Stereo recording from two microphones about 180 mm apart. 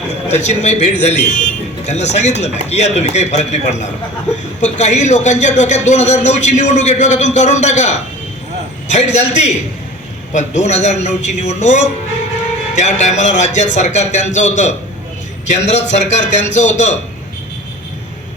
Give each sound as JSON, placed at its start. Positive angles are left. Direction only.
{"t": 0.3, "sound": "a man's voice", "side_deg": 40}